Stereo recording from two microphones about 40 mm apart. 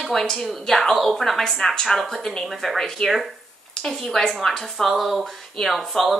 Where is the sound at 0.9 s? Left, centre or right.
Centre.